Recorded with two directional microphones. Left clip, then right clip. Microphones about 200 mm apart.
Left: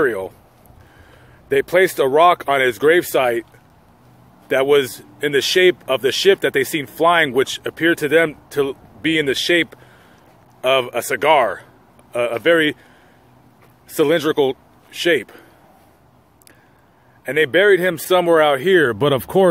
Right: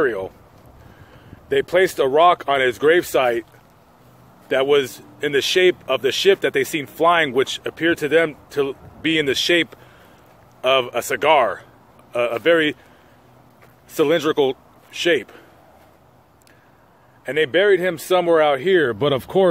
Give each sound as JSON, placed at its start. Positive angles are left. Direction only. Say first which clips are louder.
{"t": 0.0, "sound": "speech", "louder": "left 2 dB", "side_deg": 25}
{"t": 1.5, "sound": "speech", "louder": "left 2 dB", "side_deg": 25}
{"t": 4.5, "sound": "speech", "louder": "left 2 dB", "side_deg": 25}
{"t": 13.9, "sound": "speech", "louder": "left 1 dB", "side_deg": 20}
{"t": 17.2, "sound": "speech", "louder": "left 3 dB", "side_deg": 25}